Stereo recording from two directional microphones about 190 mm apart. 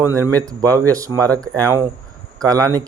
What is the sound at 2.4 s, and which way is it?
Speech, 20° right (ahead or behind).